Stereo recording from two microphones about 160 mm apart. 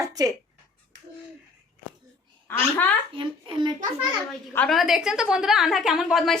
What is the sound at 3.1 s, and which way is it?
Speech, 30° right (ahead or behind).